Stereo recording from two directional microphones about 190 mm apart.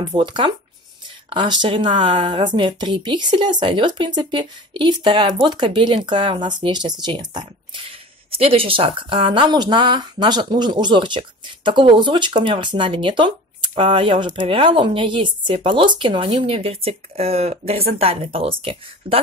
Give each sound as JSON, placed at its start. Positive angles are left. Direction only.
{"t": 0.1, "sound": "a woman's voice", "side_deg": -25}